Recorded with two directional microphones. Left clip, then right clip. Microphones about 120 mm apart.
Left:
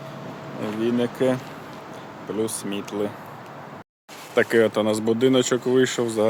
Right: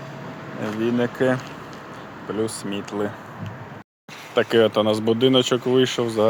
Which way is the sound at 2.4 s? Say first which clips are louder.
Even; centre (ahead or behind).